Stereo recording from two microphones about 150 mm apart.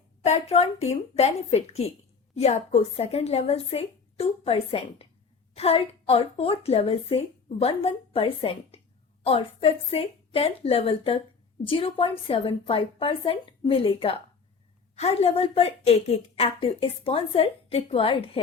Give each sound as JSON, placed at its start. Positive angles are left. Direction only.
{"t": 0.3, "sound": "a woman's voice", "side_deg": 45}